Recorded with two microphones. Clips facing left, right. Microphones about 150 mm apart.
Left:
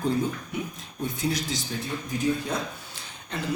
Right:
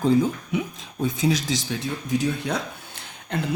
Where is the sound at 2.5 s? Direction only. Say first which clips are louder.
Right 2 dB; 70° right (ahead or behind).